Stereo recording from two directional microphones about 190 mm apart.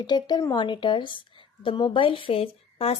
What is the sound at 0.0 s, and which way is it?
A woman's voice, 20° left (ahead or behind).